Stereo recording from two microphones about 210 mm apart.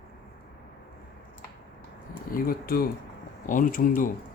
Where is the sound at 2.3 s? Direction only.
45° left (ahead or behind).